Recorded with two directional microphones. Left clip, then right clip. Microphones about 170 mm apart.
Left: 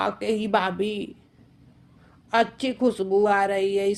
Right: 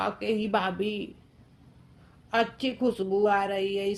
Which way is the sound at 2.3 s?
40° left (ahead or behind).